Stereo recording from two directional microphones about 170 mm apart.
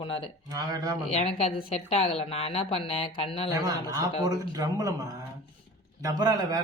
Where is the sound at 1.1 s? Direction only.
35° left (ahead or behind).